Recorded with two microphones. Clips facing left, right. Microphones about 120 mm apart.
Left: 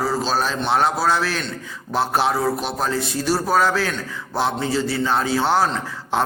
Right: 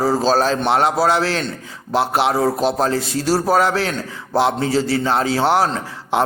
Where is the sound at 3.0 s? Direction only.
90° right.